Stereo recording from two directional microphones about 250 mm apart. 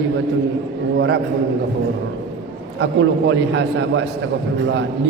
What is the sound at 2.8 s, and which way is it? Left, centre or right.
A man's voice, right.